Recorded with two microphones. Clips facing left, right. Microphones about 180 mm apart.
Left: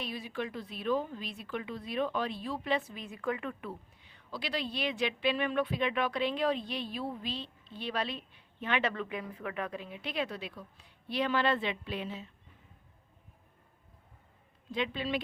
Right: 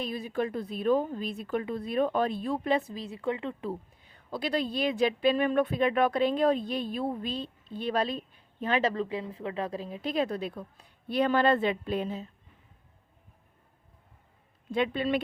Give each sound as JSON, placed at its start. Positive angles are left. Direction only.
{"t": 0.0, "sound": "a woman's voice", "side_deg": -45}
{"t": 3.2, "sound": "speech", "side_deg": -25}
{"t": 3.7, "sound": "a woman's voice", "side_deg": -45}
{"t": 14.7, "sound": "a woman's voice", "side_deg": -50}